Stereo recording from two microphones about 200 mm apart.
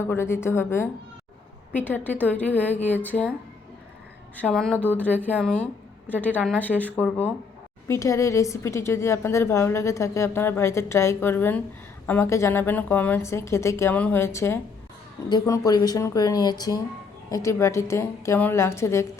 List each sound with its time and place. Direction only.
0.0 s a woman's voice: 10° left (ahead or behind)
4.4 s a woman's voice: 5° left (ahead or behind)
7.9 s a woman's voice: 15° left (ahead or behind)